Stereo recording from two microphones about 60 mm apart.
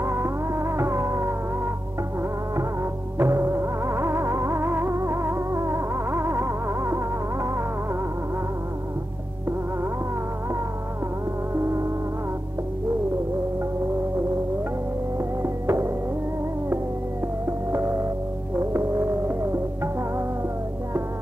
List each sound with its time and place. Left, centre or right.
0.0 s music: right
2.5 s music: right
11.5 s music: right
15.1 s music: right
17.5 s music: right